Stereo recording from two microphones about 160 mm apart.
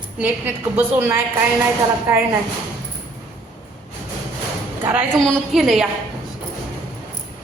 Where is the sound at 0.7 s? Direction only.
10° right (ahead or behind).